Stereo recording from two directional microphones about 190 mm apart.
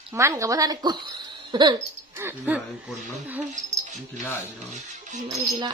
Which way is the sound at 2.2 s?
10° right (ahead or behind).